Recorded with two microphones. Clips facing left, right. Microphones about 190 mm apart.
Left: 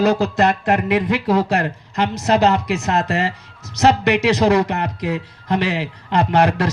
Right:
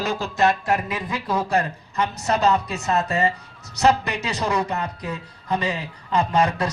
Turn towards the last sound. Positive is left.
turn(degrees=75)  # may be behind; listen again after turning